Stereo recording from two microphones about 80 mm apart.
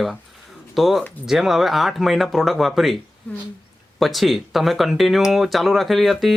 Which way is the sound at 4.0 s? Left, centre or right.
Centre.